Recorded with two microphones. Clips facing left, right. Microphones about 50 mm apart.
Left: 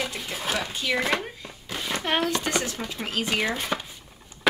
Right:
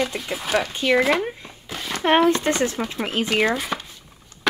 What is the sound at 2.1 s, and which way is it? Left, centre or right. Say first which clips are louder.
Speech: right 9 dB; right.